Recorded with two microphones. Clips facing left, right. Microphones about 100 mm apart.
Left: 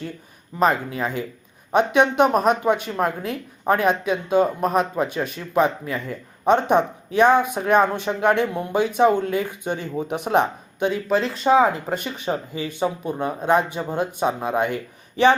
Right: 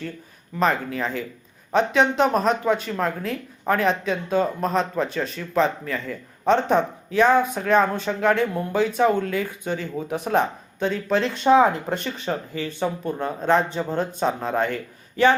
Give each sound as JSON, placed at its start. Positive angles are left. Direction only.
{"t": 0.6, "sound": "speech", "side_deg": 20}